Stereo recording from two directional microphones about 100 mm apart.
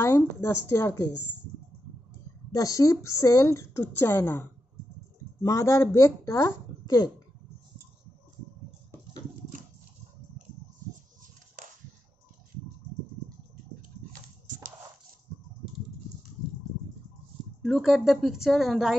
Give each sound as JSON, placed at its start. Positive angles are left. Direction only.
{"t": 0.0, "sound": "speech", "side_deg": 30}
{"t": 2.5, "sound": "speech", "side_deg": 35}
{"t": 17.6, "sound": "speech", "side_deg": 5}